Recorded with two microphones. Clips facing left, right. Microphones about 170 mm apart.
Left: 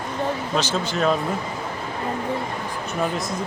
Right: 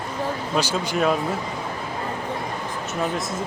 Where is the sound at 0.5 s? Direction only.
10° right (ahead or behind).